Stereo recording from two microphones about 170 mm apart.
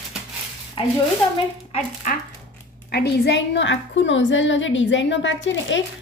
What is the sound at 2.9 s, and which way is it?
A woman's voice, 80° left.